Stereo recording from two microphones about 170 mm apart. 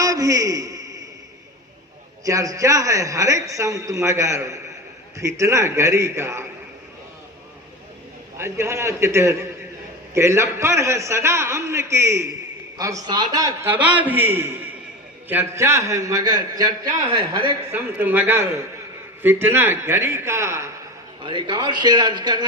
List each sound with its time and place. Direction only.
0.0 s a sound: 20° right (ahead or behind)
2.2 s a man's voice: 20° right (ahead or behind)
8.4 s a man's voice: 15° right (ahead or behind)
17.7 s a man's voice: 10° right (ahead or behind)
21.2 s a man's voice: 25° right (ahead or behind)